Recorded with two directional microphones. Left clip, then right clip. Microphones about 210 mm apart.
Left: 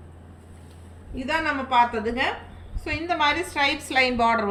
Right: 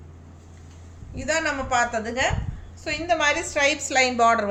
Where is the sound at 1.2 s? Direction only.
30° right (ahead or behind).